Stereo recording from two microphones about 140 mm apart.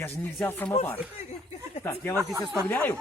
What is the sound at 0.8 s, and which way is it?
Speech, 50° left (ahead or behind).